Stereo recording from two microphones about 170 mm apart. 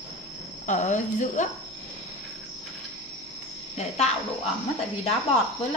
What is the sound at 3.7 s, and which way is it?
Speech, 40° left (ahead or behind).